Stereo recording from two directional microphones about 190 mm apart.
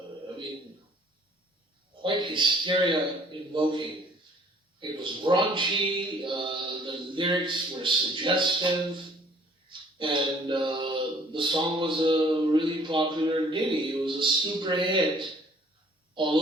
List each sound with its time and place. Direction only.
2.0 s a man's voice: 25° right (ahead or behind)